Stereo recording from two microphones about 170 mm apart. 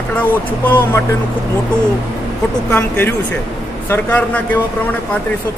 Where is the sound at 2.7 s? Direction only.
10° left (ahead or behind).